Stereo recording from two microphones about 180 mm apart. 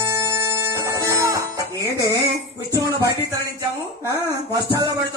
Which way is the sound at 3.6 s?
20° right (ahead or behind).